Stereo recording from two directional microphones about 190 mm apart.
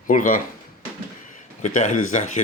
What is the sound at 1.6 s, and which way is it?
Speech, 40° left (ahead or behind).